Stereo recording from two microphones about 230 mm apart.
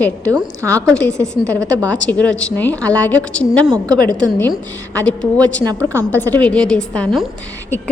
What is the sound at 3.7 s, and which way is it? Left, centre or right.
Speech, centre.